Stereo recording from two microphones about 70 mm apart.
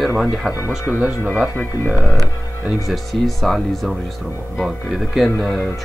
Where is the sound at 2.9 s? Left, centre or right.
Centre.